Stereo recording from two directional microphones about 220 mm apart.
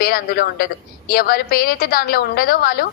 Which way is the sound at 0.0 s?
45° left (ahead or behind).